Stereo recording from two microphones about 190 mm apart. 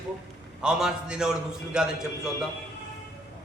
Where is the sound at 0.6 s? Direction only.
5° right (ahead or behind).